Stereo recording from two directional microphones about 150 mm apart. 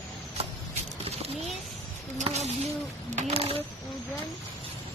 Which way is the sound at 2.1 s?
50° right (ahead or behind).